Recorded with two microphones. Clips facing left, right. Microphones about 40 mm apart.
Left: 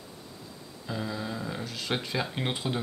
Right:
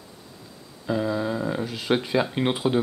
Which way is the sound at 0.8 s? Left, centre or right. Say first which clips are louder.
Right 9 dB; centre.